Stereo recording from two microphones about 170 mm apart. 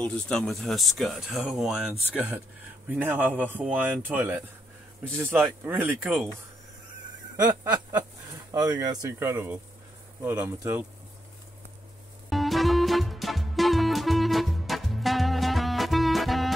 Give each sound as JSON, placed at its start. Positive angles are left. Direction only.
{"t": 0.0, "sound": "speech", "side_deg": 5}
{"t": 8.5, "sound": "speech", "side_deg": -20}
{"t": 12.3, "sound": "music", "side_deg": 0}